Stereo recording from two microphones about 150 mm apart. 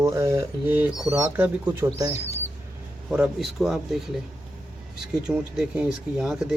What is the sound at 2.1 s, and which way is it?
Speech, 45° left (ahead or behind).